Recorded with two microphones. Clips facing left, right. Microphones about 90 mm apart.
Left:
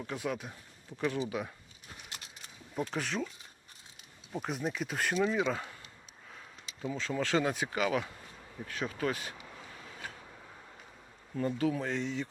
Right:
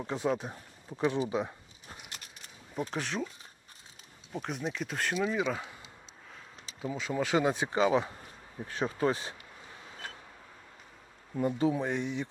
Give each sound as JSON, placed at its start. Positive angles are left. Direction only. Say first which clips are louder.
{"t": 0.0, "sound": "speech", "louder": "right 5 dB", "side_deg": -25}
{"t": 1.3, "sound": "a sound", "louder": "right 5 dB", "side_deg": -25}
{"t": 2.9, "sound": "speech", "louder": "right 1 dB", "side_deg": 0}
{"t": 4.3, "sound": "speech", "louder": "even", "side_deg": 0}
{"t": 6.8, "sound": "speech", "louder": "right 2 dB", "side_deg": -10}
{"t": 11.3, "sound": "speech", "louder": "right 3 dB", "side_deg": -20}